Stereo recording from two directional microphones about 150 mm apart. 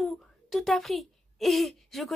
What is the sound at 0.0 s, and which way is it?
A child's voice, centre (ahead or behind).